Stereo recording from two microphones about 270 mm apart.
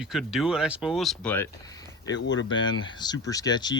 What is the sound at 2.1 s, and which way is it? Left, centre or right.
Speech, left.